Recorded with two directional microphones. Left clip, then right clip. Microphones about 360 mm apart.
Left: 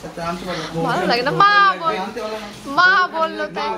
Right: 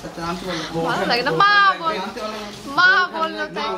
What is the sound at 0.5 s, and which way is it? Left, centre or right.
Speech, centre.